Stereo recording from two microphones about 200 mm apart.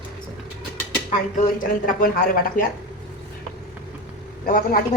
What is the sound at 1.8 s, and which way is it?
Speech, 45° left (ahead or behind).